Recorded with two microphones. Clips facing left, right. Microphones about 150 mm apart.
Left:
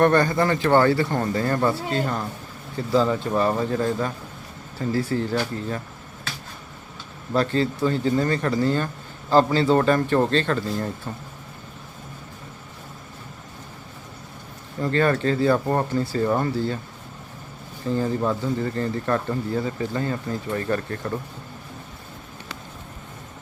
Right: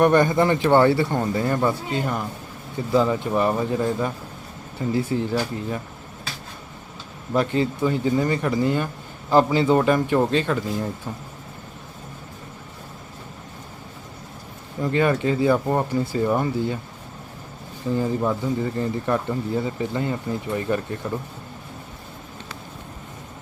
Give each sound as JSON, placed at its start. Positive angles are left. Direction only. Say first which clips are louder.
{"t": 0.0, "sound": "speech", "louder": "right 2 dB", "side_deg": -20}
{"t": 7.3, "sound": "speech", "louder": "even", "side_deg": -15}
{"t": 14.8, "sound": "speech", "louder": "even", "side_deg": -15}
{"t": 17.8, "sound": "speech", "louder": "right 1 dB", "side_deg": -15}